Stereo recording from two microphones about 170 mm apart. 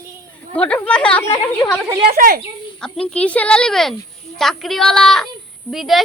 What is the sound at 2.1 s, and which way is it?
Speech, 55° right (ahead or behind).